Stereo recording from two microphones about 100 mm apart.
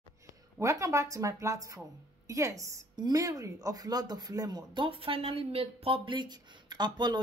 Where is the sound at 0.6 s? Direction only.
30° right (ahead or behind).